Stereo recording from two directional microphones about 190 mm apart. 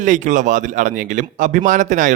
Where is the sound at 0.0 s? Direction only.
40° right (ahead or behind).